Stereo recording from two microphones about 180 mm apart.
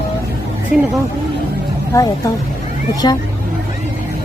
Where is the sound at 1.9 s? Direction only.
20° left (ahead or behind).